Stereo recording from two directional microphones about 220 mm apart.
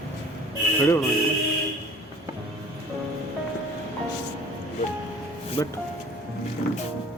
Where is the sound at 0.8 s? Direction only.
10° left (ahead or behind).